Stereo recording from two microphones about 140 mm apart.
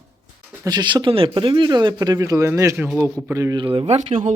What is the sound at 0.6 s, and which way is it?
A man's voice, 30° right (ahead or behind).